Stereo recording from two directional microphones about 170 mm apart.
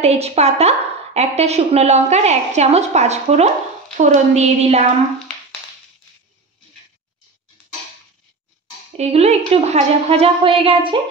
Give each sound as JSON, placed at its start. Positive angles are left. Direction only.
{"t": 0.0, "sound": "a woman's voice", "side_deg": -40}
{"t": 8.9, "sound": "a woman's voice", "side_deg": -40}